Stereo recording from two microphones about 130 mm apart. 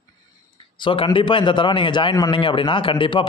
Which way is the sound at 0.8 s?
40° left (ahead or behind).